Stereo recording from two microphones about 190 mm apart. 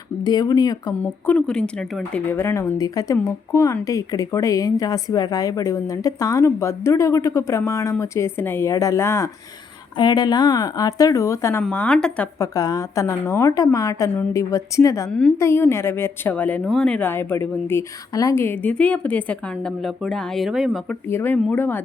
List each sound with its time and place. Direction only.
0.3 s speech: 20° left (ahead or behind)
1.3 s speech: 5° left (ahead or behind)
21.1 s speech: 10° left (ahead or behind)